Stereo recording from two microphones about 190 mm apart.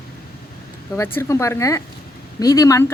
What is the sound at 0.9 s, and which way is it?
Speech, 15° left (ahead or behind).